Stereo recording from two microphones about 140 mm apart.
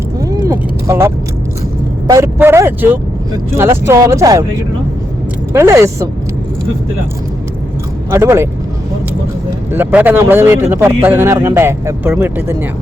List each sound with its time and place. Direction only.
0.2 s vehicle: 25° right (ahead or behind)
2.0 s speech: 20° right (ahead or behind)
5.5 s speech: 20° right (ahead or behind)
8.1 s speech: 20° right (ahead or behind)
9.7 s speech: 15° right (ahead or behind)